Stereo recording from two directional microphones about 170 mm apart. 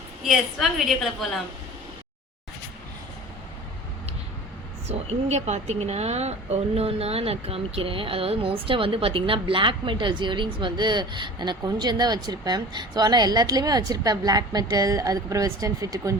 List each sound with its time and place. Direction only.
0.3 s a woman's voice: centre (ahead or behind)
4.9 s a woman's voice: 40° right (ahead or behind); by 16.1 s 20° right (ahead or behind)